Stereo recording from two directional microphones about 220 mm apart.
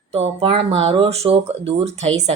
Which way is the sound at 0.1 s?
25° right (ahead or behind).